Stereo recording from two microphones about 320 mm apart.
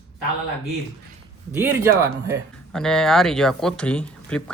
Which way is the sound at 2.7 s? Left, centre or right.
Centre.